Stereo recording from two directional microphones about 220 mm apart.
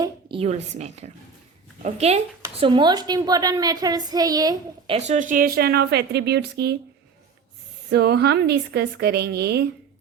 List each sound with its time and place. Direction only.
0.0 s a woman's voice: 25° right (ahead or behind)
4.9 s a woman's voice: 30° right (ahead or behind); by 6.7 s 50° right (ahead or behind)
7.9 s a woman's voice: 45° right (ahead or behind)